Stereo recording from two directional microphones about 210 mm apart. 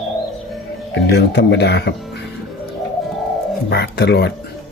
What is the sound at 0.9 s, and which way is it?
Speech, 55° left (ahead or behind).